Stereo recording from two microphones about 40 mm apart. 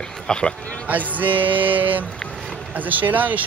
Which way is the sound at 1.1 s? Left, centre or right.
Right.